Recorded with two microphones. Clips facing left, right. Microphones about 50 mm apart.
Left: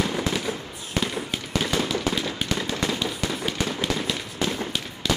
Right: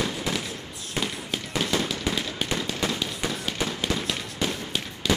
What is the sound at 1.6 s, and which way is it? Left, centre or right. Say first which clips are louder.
Firecracker: left 1 dB; centre.